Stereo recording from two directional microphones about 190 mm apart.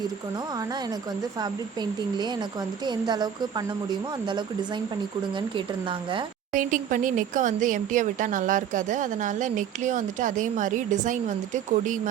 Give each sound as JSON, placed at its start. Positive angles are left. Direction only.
{"t": 1.4, "sound": "speech", "side_deg": -20}
{"t": 6.5, "sound": "speech", "side_deg": -45}